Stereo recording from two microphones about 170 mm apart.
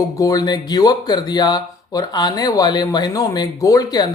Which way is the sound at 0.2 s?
20° left (ahead or behind).